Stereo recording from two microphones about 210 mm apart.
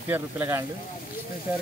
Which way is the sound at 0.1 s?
10° right (ahead or behind).